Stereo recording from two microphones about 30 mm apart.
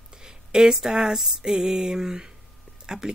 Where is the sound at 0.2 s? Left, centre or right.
Right.